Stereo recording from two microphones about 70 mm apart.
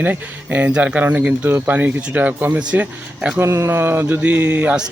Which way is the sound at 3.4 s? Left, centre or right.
Right.